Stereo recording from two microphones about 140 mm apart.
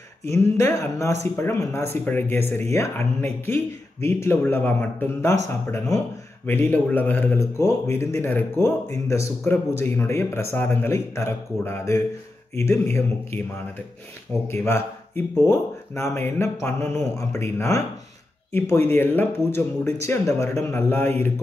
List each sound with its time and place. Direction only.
0.6 s a man's voice: 20° left (ahead or behind)
6.4 s a man's voice: 15° left (ahead or behind)
14.5 s a man's voice: 15° left (ahead or behind)